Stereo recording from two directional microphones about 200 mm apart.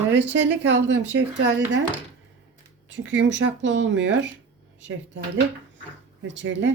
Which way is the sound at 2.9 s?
65° right (ahead or behind).